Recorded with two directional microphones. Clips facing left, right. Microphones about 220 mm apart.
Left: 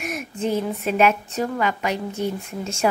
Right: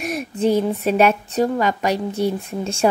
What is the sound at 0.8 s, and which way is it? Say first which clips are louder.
A woman's voice: even; 35° right (ahead or behind).